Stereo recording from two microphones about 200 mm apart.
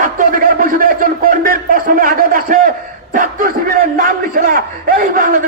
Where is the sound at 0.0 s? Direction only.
45° right (ahead or behind).